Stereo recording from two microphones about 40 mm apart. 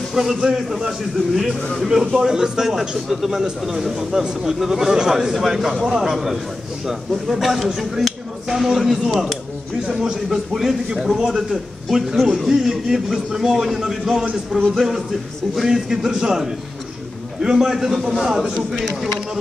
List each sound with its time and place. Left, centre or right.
0.1 s a man's voice: centre
2.1 s a man's voice: centre
9.9 s a man's voice: centre
10.5 s a man's voice: centre
12.4 s a man's voice: centre